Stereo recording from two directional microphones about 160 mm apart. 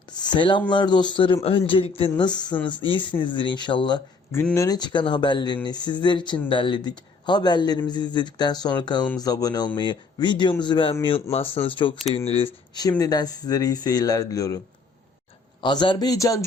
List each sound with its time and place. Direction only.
0.1 s speech: 25° left (ahead or behind)
15.6 s speech: 30° left (ahead or behind)